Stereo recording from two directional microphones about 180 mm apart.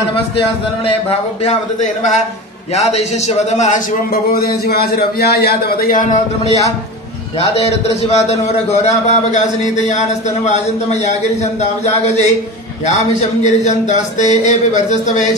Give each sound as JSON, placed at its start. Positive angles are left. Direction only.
{"t": 1.4, "sound": "speech", "side_deg": 40}
{"t": 4.1, "sound": "a man's voice", "side_deg": 55}
{"t": 8.8, "sound": "speech", "side_deg": 40}